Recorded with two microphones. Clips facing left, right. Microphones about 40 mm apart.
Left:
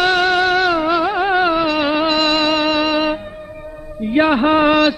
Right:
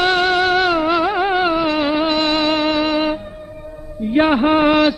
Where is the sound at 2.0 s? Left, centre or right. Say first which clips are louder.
Left 1 dB; left.